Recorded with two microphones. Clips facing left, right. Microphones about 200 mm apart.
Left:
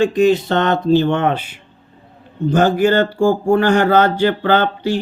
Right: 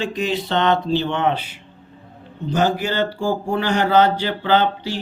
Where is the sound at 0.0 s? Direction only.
50° left (ahead or behind).